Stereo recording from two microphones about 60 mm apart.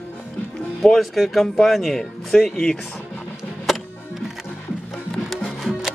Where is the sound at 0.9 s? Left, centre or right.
Centre.